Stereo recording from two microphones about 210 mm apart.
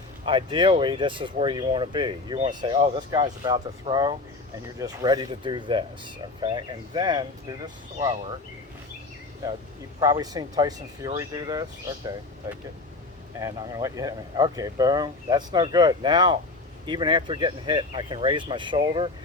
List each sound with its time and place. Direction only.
0.3 s speech: 25° right (ahead or behind)
10.0 s speech: 15° right (ahead or behind)